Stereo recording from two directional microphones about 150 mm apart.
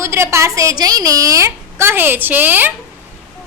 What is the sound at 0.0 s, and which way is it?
A woman's voice, 20° right (ahead or behind).